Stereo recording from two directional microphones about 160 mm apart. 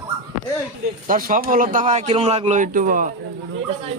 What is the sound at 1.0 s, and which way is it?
A man's voice, 55° right (ahead or behind).